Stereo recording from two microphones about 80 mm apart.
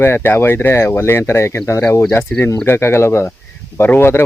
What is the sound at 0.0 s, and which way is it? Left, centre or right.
Speech, left.